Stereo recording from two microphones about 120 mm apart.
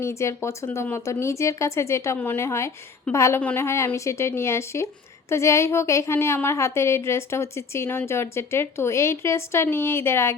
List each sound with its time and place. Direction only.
0.0 s a woman's voice: 25° left (ahead or behind)